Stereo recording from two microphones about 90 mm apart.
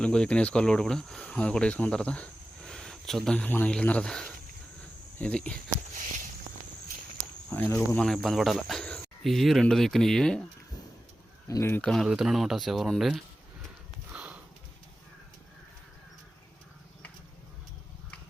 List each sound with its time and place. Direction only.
0.0 s speech: 10° left (ahead or behind)
7.5 s speech: 20° left (ahead or behind)
8.0 s cricket: 5° left (ahead or behind)
11.4 s speech: 35° left (ahead or behind)
11.8 s cricket: 5° left (ahead or behind)
14.1 s sniff: 15° right (ahead or behind)